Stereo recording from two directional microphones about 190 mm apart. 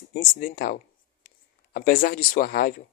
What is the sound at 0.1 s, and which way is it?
Speech, 45° left (ahead or behind).